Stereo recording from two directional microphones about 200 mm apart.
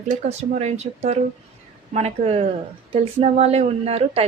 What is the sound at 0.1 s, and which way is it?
Speech, 35° right (ahead or behind).